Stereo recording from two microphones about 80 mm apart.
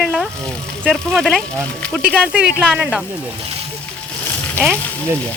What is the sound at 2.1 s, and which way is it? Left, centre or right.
Speech, centre.